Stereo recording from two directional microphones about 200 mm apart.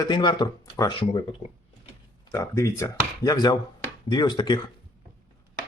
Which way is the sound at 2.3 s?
15° left (ahead or behind).